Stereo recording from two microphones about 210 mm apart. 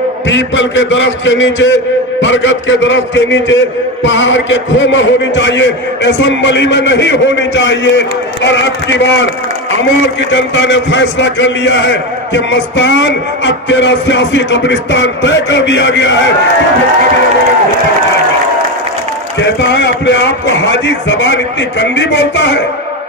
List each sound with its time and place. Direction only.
0.3 s a man's voice: 60° left (ahead or behind)
10.3 s a man's voice: 60° left (ahead or behind)
19.4 s a man's voice: 55° left (ahead or behind)